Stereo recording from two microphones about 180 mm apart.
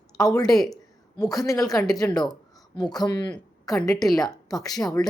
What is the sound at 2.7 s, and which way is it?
Speech, 20° left (ahead or behind).